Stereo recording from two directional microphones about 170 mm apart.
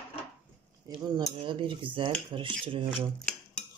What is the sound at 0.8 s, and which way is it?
Speech, 25° right (ahead or behind).